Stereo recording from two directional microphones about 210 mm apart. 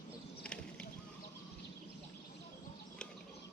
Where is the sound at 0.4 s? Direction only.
5° left (ahead or behind).